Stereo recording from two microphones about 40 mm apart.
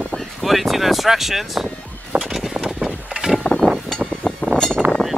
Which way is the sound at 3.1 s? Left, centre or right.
Centre.